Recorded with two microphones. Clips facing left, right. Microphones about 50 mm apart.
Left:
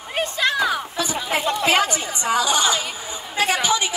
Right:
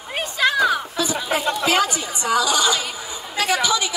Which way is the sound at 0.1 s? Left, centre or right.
Centre.